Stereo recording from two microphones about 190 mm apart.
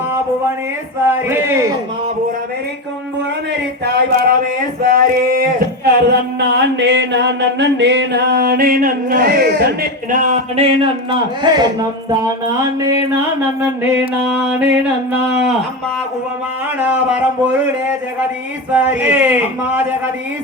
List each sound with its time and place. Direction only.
1.1 s speech: 10° right (ahead or behind)
3.8 s a sound: 55° right (ahead or behind)
11.1 s speech: 25° right (ahead or behind)
13.8 s speech: 10° right (ahead or behind)
16.9 s speech: 10° right (ahead or behind)
18.7 s speech: 10° right (ahead or behind)